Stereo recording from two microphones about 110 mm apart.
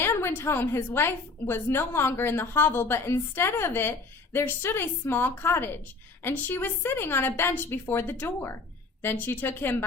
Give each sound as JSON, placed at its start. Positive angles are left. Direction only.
{"t": 0.0, "sound": "a woman's voice", "side_deg": 20}